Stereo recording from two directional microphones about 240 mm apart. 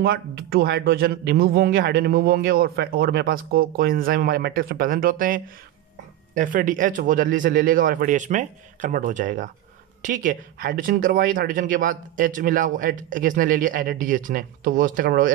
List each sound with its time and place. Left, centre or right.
0.0 s speech: right